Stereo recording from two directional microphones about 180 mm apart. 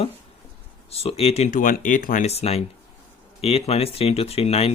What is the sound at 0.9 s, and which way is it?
Speech, 35° left (ahead or behind).